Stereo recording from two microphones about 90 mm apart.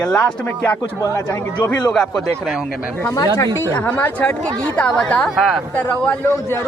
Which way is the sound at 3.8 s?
25° left (ahead or behind).